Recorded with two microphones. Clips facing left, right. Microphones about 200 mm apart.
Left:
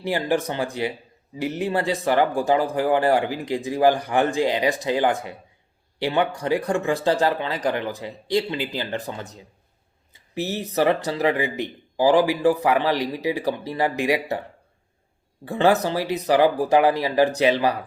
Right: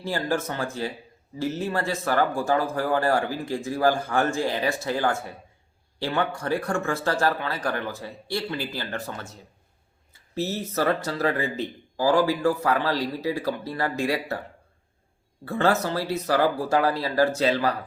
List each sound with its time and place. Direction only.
0.0 s speech: 15° left (ahead or behind)
15.4 s speech: 15° left (ahead or behind)